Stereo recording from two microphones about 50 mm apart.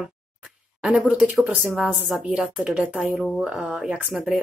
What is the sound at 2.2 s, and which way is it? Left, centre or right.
Speech, centre.